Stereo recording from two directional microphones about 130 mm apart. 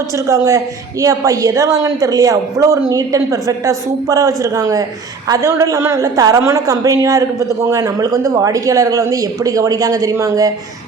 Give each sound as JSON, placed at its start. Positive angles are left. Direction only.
{"t": 0.3, "sound": "a woman's voice", "side_deg": -25}